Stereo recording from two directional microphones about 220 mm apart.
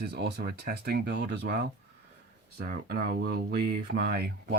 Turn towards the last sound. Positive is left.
turn(degrees=-45)  # may be behind; listen again after turning